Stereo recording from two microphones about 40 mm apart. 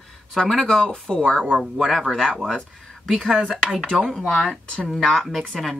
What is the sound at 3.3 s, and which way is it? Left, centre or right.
Speech, centre.